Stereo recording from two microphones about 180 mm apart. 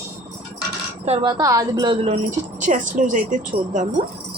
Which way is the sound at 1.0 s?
30° right (ahead or behind).